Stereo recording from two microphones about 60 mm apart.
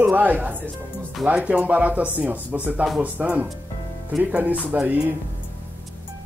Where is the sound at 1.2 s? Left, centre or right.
Right.